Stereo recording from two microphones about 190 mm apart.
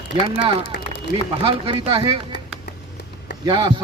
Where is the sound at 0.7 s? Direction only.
55° left (ahead or behind).